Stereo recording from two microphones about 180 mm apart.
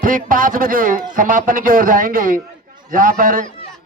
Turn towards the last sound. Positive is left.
turn(degrees=-50)  # may be behind; listen again after turning